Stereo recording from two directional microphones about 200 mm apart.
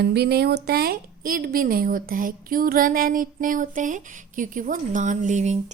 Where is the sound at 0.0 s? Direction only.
55° right (ahead or behind).